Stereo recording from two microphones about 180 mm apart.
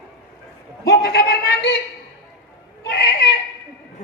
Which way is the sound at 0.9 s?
65° left (ahead or behind).